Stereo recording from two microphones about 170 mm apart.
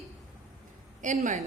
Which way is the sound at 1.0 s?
45° right (ahead or behind).